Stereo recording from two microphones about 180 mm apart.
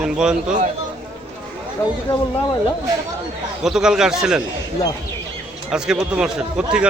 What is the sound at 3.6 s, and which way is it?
Speech, 5° right (ahead or behind).